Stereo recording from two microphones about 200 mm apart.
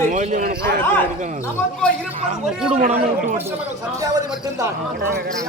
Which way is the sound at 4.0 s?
15° right (ahead or behind).